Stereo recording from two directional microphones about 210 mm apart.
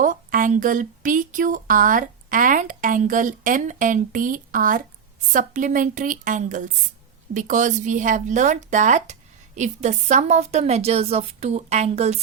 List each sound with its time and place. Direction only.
0.0 s speech: 40° right (ahead or behind)